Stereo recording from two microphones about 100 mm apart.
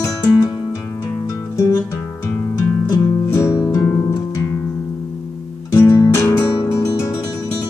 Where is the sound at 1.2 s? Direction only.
35° left (ahead or behind).